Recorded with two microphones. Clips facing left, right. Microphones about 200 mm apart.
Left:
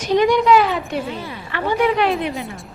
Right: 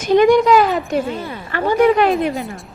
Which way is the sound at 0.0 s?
50° right (ahead or behind).